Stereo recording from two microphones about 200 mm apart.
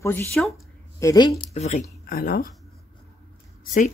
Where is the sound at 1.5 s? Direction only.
35° left (ahead or behind).